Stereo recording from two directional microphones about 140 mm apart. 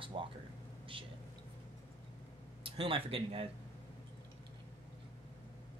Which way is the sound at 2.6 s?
40° right (ahead or behind).